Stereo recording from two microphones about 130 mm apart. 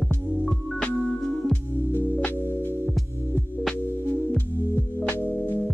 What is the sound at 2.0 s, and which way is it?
Music, 15° left (ahead or behind).